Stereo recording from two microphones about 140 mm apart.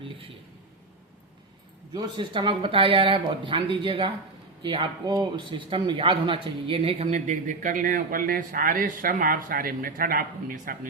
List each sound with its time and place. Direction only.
1.9 s a man's voice: 30° right (ahead or behind); by 10.8 s 90° right